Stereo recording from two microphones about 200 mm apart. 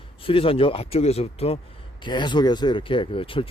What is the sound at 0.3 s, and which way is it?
Speech, 25° left (ahead or behind).